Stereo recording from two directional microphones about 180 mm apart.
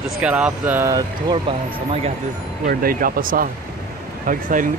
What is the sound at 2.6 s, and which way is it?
Speech, 55° right (ahead or behind).